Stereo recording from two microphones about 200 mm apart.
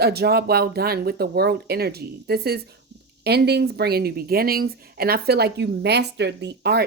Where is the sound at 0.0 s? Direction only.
50° right (ahead or behind).